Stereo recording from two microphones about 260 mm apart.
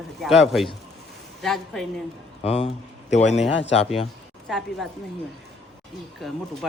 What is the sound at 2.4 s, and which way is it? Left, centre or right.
Speech, left.